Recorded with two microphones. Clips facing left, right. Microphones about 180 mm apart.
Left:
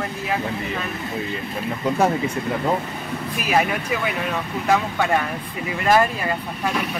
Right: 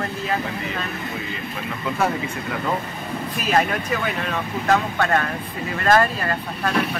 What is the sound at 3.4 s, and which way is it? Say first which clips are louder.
Speech: even; 10° left (ahead or behind).